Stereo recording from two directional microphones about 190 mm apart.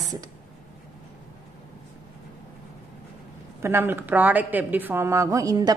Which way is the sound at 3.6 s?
10° right (ahead or behind).